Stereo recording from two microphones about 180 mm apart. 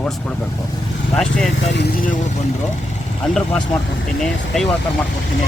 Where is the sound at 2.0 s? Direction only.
45° left (ahead or behind).